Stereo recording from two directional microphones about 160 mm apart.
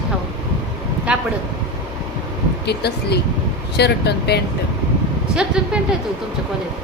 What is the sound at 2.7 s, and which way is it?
Speech, 90° left.